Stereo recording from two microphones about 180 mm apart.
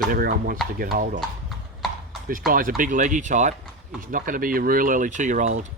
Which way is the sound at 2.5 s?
50° right (ahead or behind).